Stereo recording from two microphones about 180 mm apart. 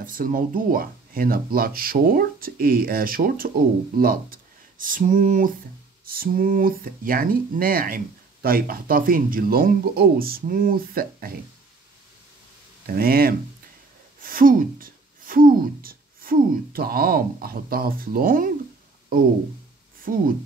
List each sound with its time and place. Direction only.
0.0 s speech: 50° right (ahead or behind)
12.8 s speech: 55° right (ahead or behind)